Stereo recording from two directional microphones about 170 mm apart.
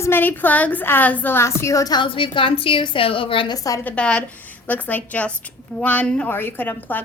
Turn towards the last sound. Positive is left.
turn(degrees=10)  # may be behind; listen again after turning